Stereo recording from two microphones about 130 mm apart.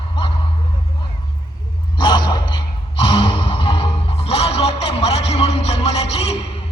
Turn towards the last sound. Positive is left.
turn(degrees=50)  # may be behind; listen again after turning